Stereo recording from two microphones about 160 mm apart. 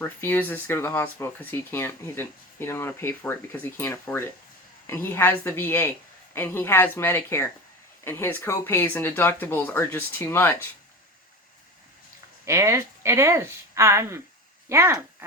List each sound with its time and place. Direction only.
0.0 s speech: 10° left (ahead or behind)
12.5 s speech: 15° right (ahead or behind)